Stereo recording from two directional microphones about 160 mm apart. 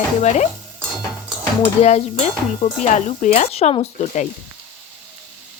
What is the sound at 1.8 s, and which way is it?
Speech, 45° left (ahead or behind).